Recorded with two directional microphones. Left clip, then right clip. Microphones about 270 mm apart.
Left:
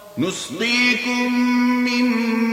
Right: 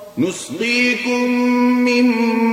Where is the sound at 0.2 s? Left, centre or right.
Left.